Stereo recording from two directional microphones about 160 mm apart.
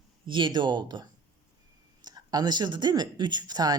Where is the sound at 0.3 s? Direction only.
30° right (ahead or behind).